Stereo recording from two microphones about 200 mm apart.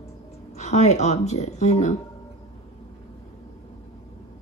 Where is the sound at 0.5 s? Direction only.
35° left (ahead or behind).